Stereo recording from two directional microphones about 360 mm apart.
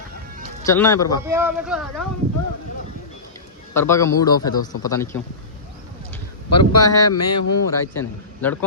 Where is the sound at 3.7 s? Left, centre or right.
Centre.